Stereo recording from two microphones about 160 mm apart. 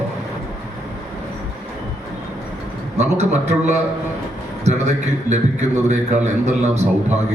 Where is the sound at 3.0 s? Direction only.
45° right (ahead or behind).